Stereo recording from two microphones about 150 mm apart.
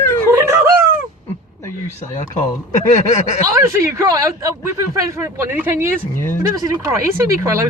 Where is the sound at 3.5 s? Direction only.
20° right (ahead or behind).